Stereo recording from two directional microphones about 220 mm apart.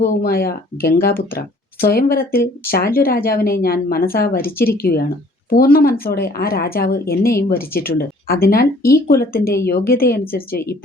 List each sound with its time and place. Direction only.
0.0 s speech: 45° left (ahead or behind)